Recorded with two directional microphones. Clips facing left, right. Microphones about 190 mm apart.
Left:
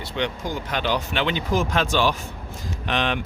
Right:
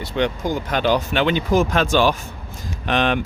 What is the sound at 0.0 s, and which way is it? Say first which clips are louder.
Speech: right 5 dB; 45° right (ahead or behind).